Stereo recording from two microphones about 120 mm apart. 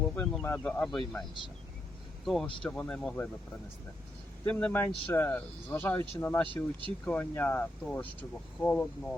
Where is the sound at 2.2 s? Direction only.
Centre (ahead or behind).